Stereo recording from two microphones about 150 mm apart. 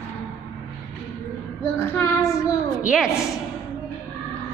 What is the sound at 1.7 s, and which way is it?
Child singing, 15° left (ahead or behind).